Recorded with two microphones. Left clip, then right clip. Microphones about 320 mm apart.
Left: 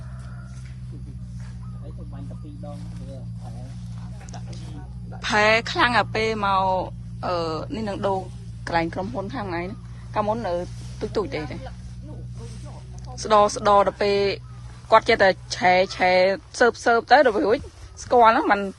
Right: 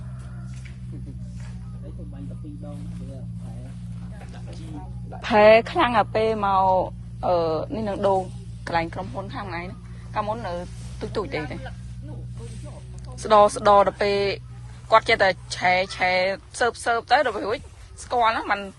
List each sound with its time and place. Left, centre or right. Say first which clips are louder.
5.2 s a woman's voice: right 4 dB; centre
8.7 s speech: left 2 dB; centre
13.1 s a woman's voice: right 2 dB; centre